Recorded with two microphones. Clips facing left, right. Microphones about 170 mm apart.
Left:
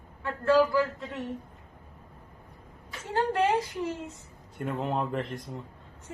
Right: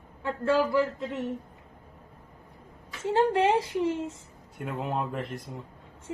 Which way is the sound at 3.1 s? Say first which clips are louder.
Right 3 dB; 25° right (ahead or behind).